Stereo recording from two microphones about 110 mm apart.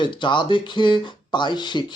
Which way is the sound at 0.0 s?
45° left (ahead or behind).